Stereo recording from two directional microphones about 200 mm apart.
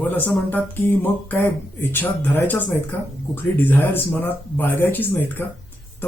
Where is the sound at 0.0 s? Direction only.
10° left (ahead or behind).